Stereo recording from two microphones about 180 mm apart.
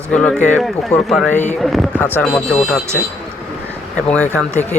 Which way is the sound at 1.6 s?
Centre (ahead or behind).